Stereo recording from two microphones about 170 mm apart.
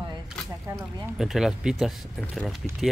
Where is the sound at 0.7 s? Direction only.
20° right (ahead or behind).